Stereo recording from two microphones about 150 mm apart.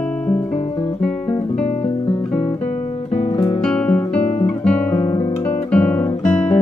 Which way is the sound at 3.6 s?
5° left (ahead or behind).